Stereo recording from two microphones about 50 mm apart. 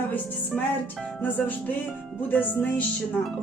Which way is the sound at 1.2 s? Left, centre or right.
Left.